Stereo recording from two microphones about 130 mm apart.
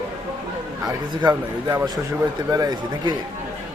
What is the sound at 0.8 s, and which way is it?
Speech, 30° right (ahead or behind).